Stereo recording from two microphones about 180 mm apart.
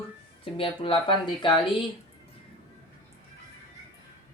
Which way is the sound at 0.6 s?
30° left (ahead or behind).